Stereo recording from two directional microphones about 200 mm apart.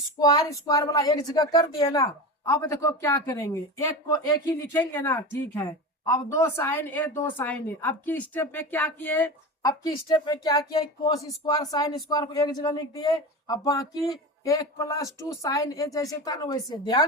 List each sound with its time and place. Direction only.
0.2 s a woman's voice: 20° left (ahead or behind)